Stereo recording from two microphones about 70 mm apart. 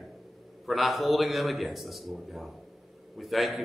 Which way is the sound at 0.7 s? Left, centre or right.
Centre.